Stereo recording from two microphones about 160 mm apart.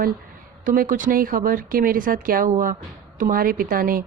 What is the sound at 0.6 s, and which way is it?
Speech, 60° right (ahead or behind).